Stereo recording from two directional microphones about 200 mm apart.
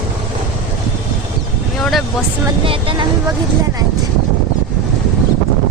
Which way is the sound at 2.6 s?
25° right (ahead or behind).